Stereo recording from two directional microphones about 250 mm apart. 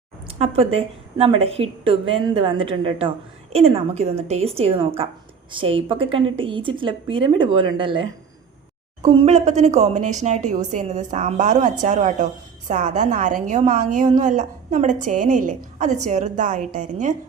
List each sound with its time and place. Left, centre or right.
0.3 s a woman's voice: right
9.0 s a woman's voice: right